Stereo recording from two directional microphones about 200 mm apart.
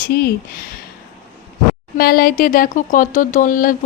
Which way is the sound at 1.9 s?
50° left (ahead or behind).